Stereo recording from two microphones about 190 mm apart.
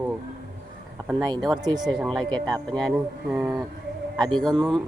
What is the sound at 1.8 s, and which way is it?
Speech, centre (ahead or behind).